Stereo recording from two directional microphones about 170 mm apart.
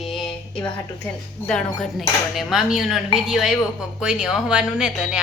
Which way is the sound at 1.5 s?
5° left (ahead or behind).